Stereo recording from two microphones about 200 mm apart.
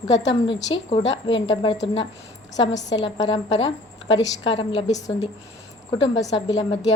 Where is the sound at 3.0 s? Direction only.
25° left (ahead or behind).